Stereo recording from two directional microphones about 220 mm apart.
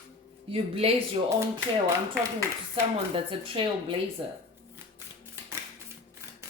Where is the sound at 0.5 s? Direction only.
25° right (ahead or behind).